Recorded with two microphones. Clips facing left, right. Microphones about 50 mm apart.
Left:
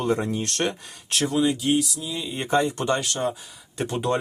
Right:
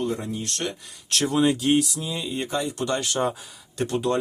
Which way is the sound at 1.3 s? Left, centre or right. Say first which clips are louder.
Right 1 dB; right.